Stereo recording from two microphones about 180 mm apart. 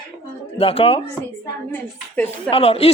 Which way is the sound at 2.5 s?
35° left (ahead or behind).